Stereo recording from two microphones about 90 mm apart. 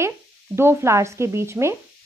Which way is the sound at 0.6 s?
30° right (ahead or behind).